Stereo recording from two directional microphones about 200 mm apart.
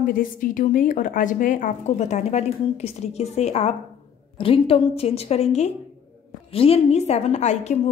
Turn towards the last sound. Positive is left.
turn(degrees=35)  # may be behind; listen again after turning